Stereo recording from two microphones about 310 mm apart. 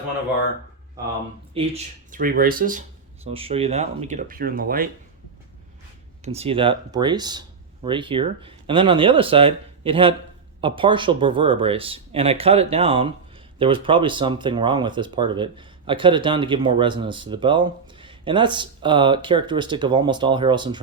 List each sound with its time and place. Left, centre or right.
1.5 s speech: right
6.2 s speech: centre